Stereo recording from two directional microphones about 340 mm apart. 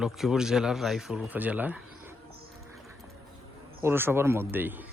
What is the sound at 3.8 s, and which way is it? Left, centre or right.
Speech, centre.